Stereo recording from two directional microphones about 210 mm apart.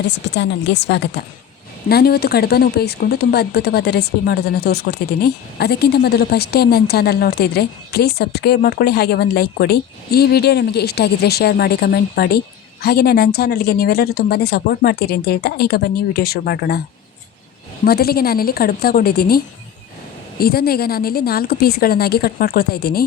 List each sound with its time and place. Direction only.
0.1 s speech: 55° left (ahead or behind)
17.8 s speech: 45° left (ahead or behind)
20.4 s speech: 45° left (ahead or behind)